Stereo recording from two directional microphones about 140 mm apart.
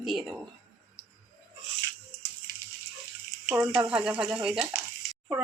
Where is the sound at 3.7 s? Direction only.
5° right (ahead or behind).